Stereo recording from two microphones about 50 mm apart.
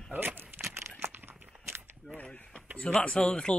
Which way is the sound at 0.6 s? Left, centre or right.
Right.